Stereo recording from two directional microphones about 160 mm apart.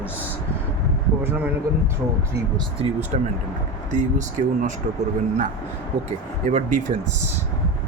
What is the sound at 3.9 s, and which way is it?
Speech, 50° right (ahead or behind).